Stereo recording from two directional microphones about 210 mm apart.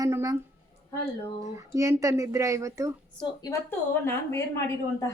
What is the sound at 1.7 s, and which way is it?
Speech, 15° right (ahead or behind).